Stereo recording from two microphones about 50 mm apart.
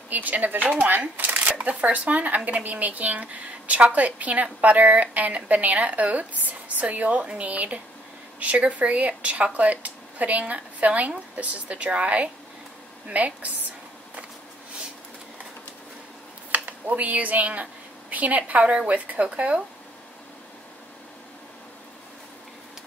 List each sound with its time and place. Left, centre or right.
0.1 s speech: right
16.5 s speech: right